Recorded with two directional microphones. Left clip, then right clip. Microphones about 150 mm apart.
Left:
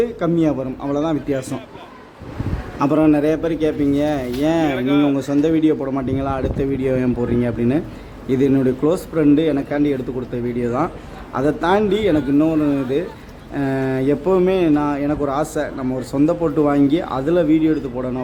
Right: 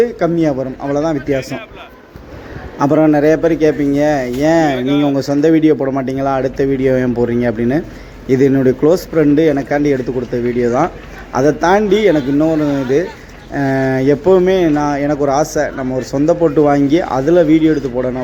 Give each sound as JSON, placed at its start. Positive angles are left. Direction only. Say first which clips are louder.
{"t": 0.0, "sound": "speech", "louder": "right 5 dB", "side_deg": -10}
{"t": 1.4, "sound": "a man's voice", "louder": "right 5 dB", "side_deg": 15}
{"t": 2.7, "sound": "speech", "louder": "right 4 dB", "side_deg": -20}
{"t": 4.7, "sound": "speech", "louder": "right 3 dB", "side_deg": 0}
{"t": 5.1, "sound": "speech", "louder": "right 6 dB", "side_deg": -20}